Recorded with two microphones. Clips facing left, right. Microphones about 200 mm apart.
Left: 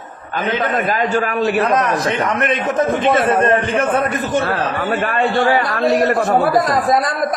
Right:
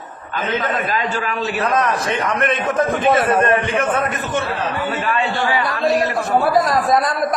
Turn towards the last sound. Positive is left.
turn(degrees=55)  # may be behind; listen again after turning